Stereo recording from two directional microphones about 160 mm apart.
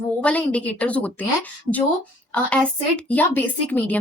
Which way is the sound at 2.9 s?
10° left (ahead or behind).